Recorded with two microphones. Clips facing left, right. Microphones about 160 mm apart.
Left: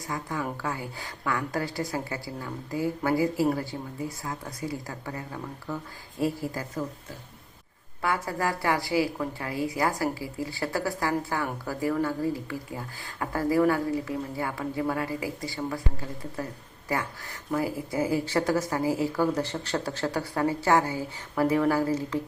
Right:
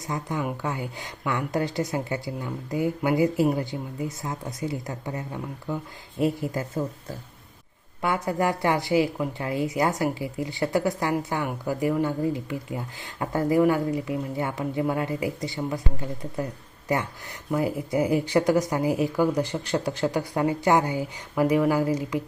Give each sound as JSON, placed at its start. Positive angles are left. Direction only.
{"t": 0.1, "sound": "a woman's voice", "side_deg": -20}
{"t": 8.0, "sound": "a woman's voice", "side_deg": -20}